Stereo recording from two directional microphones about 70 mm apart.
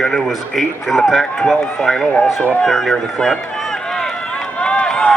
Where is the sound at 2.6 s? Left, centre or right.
Centre.